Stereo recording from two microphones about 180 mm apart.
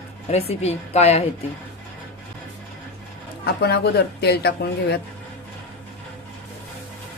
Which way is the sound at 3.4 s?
65° left (ahead or behind).